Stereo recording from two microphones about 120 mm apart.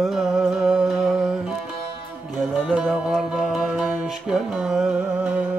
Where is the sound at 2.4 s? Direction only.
5° left (ahead or behind).